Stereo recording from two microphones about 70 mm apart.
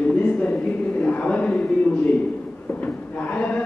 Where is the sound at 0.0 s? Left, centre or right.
Centre.